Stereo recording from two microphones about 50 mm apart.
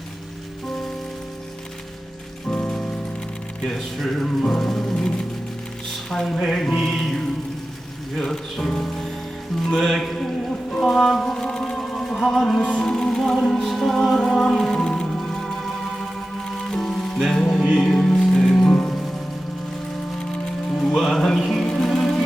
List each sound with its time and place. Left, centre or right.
2.5 s rain on surface: centre
3.6 s music: centre
6.2 s music: centre
16.6 s music: centre
20.8 s music: centre